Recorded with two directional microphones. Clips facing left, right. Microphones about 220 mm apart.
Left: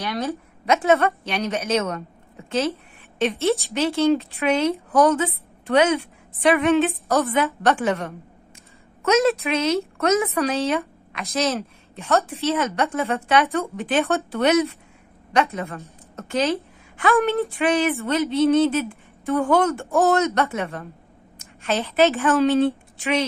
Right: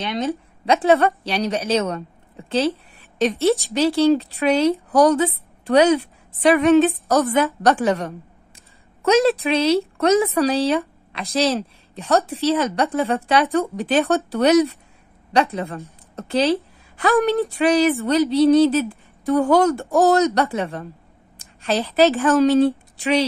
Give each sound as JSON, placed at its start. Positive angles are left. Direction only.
{"t": 0.0, "sound": "a woman's voice", "side_deg": -25}